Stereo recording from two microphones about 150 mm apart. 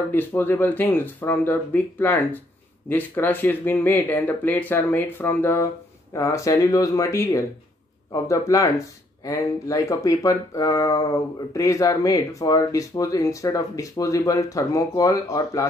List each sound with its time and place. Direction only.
0.1 s speech: 15° left (ahead or behind)